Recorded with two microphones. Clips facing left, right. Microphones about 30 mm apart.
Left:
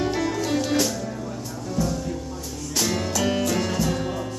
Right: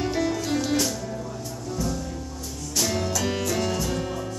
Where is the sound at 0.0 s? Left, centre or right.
Centre.